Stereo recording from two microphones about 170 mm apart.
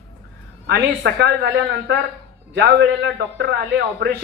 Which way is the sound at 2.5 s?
75° right (ahead or behind).